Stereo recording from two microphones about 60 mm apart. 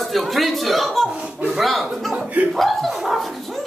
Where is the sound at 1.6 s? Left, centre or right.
Centre.